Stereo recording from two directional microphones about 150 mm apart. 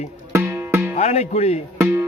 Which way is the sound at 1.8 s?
15° right (ahead or behind).